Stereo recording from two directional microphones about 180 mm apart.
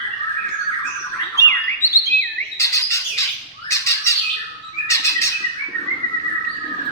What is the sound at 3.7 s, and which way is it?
Squawk, 15° left (ahead or behind).